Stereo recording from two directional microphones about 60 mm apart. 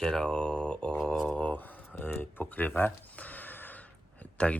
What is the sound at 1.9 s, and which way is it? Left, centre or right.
Speech, left.